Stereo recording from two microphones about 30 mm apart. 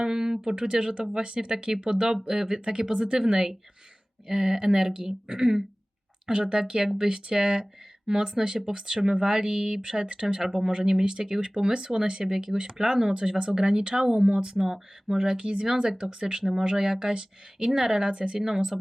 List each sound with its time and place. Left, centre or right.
0.0 s speech: centre
2.2 s speech: centre
17.7 s speech: centre
18.3 s speech: centre